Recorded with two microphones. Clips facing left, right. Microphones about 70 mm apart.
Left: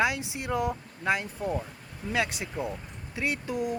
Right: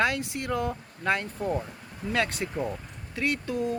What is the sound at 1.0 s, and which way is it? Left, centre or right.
Speech, centre.